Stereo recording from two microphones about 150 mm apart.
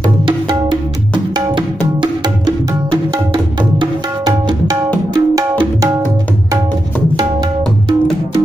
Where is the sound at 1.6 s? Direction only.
30° right (ahead or behind).